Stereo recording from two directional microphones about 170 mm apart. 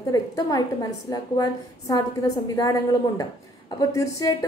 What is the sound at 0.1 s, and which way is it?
A woman's voice, 20° left (ahead or behind).